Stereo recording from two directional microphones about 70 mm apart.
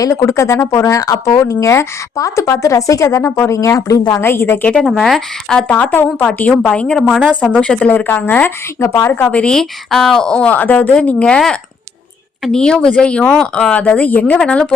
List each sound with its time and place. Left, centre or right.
0.0 s speech: left
4.2 s a woman's voice: left
4.8 s speech: centre
5.6 s speech: left
6.5 s a woman's voice: centre
7.9 s speech: left
8.8 s a woman's voice: left
9.3 s a woman's voice: centre